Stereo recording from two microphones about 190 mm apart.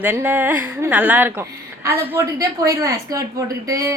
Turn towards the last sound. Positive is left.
turn(degrees=-15)  # may be behind; listen again after turning